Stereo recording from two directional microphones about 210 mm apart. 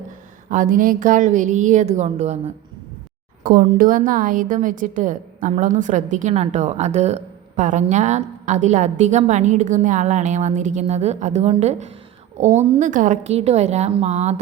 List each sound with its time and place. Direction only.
0.5 s a woman's voice: 40° right (ahead or behind)
3.4 s a woman's voice: 40° right (ahead or behind)